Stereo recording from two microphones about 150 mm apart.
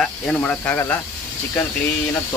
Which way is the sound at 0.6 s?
15° left (ahead or behind).